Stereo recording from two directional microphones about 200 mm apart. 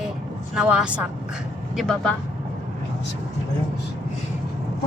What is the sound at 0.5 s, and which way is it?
Speech, 5° right (ahead or behind).